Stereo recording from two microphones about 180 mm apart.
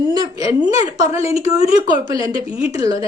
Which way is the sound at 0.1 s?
20° right (ahead or behind).